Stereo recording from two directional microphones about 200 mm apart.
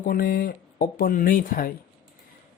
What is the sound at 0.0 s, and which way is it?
Speech, 45° left (ahead or behind).